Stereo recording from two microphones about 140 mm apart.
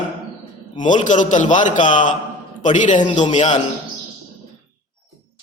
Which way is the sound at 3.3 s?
60° left (ahead or behind).